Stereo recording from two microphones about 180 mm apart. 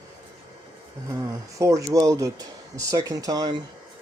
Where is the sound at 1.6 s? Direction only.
15° right (ahead or behind).